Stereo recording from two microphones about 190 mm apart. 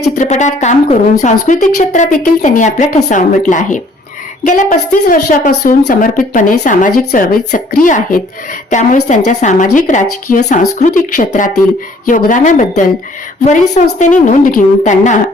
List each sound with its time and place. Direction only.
0.0 s a woman's voice: 40° left (ahead or behind)